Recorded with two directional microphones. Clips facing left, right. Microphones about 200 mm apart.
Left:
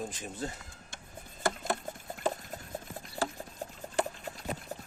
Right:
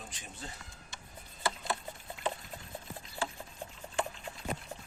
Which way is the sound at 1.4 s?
50° left (ahead or behind).